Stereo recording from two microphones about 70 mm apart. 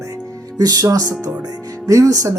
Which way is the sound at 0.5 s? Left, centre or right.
Right.